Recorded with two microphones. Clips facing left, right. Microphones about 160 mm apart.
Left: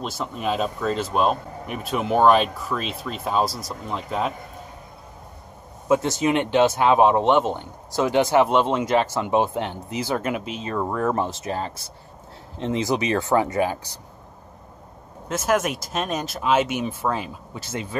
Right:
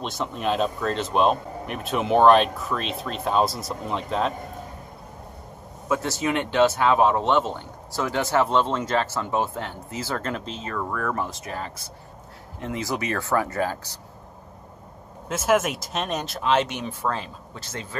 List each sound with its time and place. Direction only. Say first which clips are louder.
0.0 s speech: even; 5° left (ahead or behind)
5.9 s speech: left 5 dB; 20° left (ahead or behind)
15.2 s speech: even; centre (ahead or behind)